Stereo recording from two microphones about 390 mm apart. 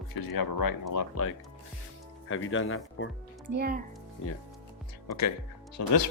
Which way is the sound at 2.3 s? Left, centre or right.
Left.